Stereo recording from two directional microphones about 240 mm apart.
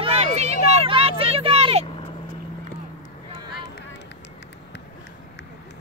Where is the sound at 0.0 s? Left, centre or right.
Right.